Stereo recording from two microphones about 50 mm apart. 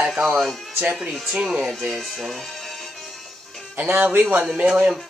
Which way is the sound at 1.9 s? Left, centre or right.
Centre.